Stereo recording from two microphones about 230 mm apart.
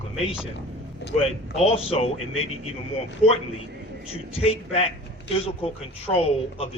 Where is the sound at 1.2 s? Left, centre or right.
Left.